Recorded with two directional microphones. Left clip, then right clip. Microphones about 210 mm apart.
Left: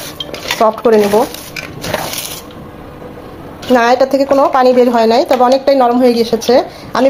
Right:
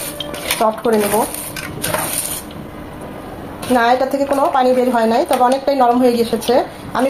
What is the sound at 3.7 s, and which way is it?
Speech, 40° left (ahead or behind).